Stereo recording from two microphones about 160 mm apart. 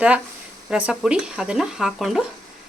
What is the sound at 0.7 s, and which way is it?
Speech, 5° right (ahead or behind).